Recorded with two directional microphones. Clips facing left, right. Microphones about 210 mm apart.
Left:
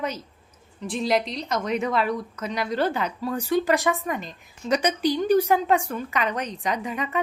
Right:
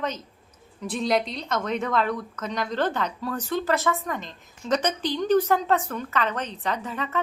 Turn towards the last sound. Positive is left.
turn(degrees=15)  # may be behind; listen again after turning